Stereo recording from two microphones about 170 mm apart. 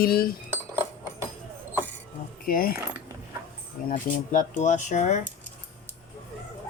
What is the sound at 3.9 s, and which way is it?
Speech, 50° left (ahead or behind).